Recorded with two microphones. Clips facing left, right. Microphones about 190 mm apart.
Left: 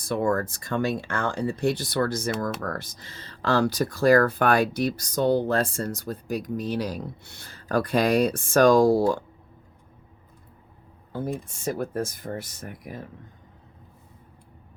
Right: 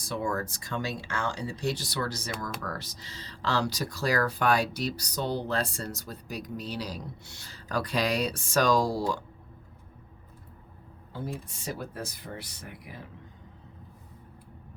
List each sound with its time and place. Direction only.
0.0 s speech: 55° left (ahead or behind)
11.4 s speech: 50° left (ahead or behind)